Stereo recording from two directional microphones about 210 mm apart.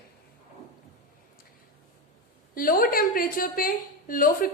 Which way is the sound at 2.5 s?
45° left (ahead or behind).